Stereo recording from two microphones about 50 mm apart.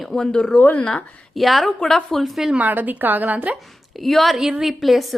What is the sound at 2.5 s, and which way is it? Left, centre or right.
A woman's voice, right.